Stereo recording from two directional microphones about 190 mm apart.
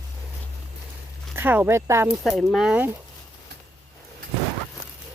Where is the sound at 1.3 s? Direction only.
10° right (ahead or behind).